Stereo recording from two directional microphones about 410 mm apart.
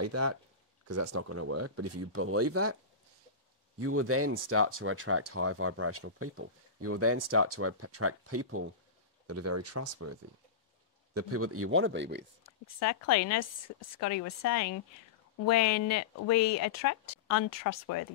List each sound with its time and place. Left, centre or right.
0.0 s speech: right
3.8 s speech: right
11.1 s speech: right
12.4 s speech: left